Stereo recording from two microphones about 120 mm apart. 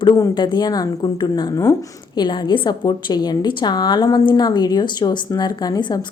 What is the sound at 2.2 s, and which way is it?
A woman's voice, 40° left (ahead or behind).